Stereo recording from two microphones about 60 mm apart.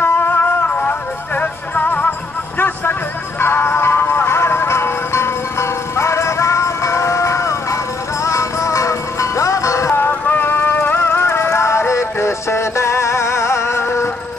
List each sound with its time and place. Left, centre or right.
0.0 s music: left
9.9 s music: left